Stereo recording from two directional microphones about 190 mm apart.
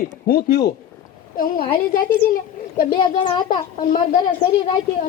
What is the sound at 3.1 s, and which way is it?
Speech, 25° left (ahead or behind).